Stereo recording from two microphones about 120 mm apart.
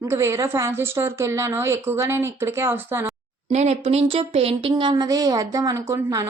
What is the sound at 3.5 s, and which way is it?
Speech, 70° right (ahead or behind).